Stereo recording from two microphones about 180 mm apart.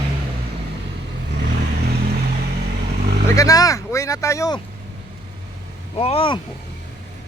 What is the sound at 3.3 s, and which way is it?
Speech, 20° left (ahead or behind).